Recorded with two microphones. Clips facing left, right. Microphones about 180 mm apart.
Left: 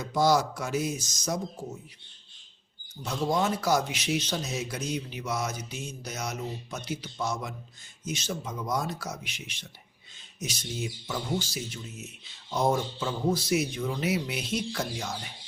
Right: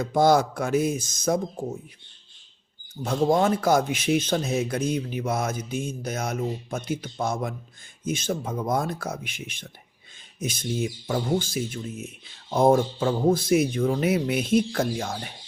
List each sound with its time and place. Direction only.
0.0 s speech: 55° right (ahead or behind)
3.0 s speech: 55° right (ahead or behind)